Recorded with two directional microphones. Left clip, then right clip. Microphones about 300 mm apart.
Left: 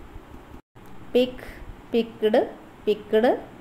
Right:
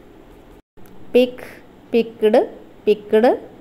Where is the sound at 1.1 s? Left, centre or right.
Centre.